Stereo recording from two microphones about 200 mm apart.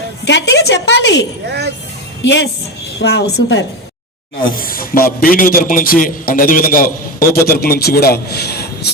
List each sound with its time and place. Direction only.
0.3 s a woman's voice: 60° left (ahead or behind)
2.2 s a woman's voice: 65° left (ahead or behind)